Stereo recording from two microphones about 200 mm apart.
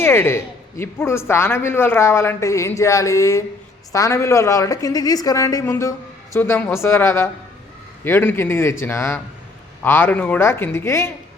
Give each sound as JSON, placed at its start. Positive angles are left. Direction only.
{"t": 0.0, "sound": "speech", "side_deg": 10}